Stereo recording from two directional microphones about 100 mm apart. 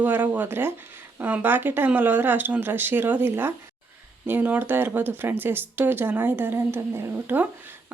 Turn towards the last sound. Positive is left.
turn(degrees=-20)  # may be behind; listen again after turning